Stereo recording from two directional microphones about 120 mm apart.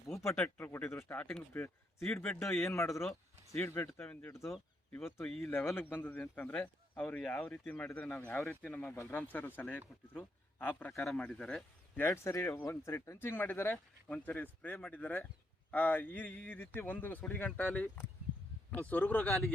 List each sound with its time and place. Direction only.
0.1 s a sound: 25° left (ahead or behind)
0.3 s speech: 15° left (ahead or behind)
2.6 s speech: 20° left (ahead or behind)
5.2 s speech: centre (ahead or behind)
5.5 s speech: 20° left (ahead or behind)
11.0 s speech: 5° left (ahead or behind)
11.9 s speech: 20° left (ahead or behind)